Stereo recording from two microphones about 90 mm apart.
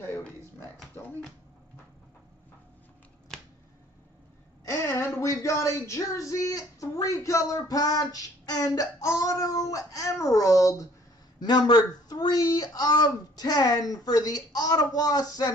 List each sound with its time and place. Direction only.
3.3 s finger snapping: centre (ahead or behind)
4.6 s speech: 30° left (ahead or behind)
11.4 s speech: 50° left (ahead or behind)